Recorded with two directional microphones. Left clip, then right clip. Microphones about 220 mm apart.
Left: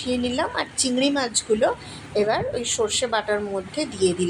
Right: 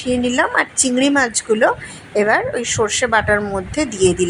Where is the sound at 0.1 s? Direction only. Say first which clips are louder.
Right 8 dB; 20° right (ahead or behind).